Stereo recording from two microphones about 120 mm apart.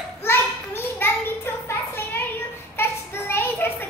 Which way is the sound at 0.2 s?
20° left (ahead or behind).